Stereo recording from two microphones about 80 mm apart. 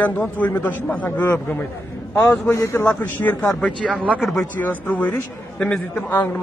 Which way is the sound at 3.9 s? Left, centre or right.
Centre.